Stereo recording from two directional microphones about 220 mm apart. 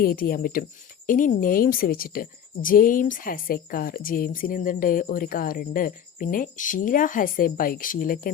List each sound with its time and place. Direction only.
0.0 s a woman's voice: 40° left (ahead or behind)